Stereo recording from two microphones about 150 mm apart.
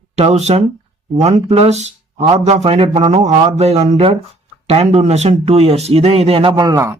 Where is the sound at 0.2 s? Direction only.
45° right (ahead or behind).